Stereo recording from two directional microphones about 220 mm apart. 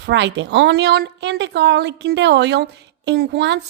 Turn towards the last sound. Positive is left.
turn(degrees=-50)  # may be behind; listen again after turning